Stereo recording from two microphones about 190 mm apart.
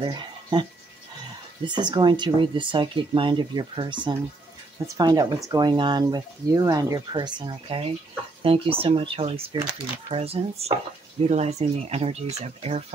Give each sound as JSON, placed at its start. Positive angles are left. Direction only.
{"t": 0.0, "sound": "speech", "side_deg": -25}
{"t": 1.7, "sound": "speech", "side_deg": -25}